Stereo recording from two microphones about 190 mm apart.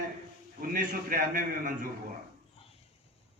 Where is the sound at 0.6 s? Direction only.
45° right (ahead or behind).